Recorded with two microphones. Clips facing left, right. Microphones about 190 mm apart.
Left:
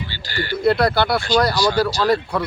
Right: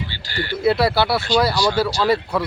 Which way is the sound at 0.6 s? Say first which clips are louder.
Even; 5° right (ahead or behind).